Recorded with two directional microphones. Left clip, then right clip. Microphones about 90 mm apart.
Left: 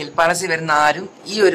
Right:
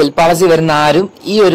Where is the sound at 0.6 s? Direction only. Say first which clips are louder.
Right 6 dB; 20° right (ahead or behind).